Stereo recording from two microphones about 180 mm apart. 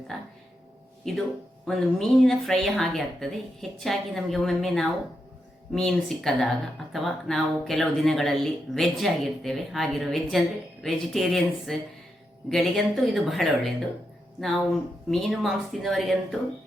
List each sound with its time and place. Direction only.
0.1 s speech: centre (ahead or behind)